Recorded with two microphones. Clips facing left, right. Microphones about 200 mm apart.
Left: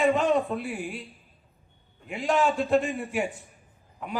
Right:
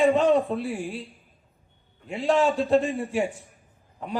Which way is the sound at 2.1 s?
30° right (ahead or behind).